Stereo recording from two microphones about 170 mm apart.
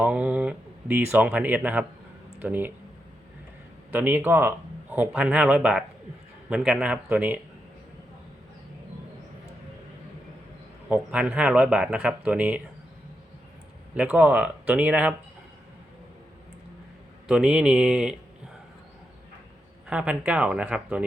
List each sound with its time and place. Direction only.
0.0 s speech: 10° right (ahead or behind)
3.9 s speech: 10° right (ahead or behind)
10.8 s speech: 10° right (ahead or behind)
13.9 s speech: 10° right (ahead or behind)
17.2 s a man's voice: 5° right (ahead or behind)
19.9 s speech: 5° right (ahead or behind)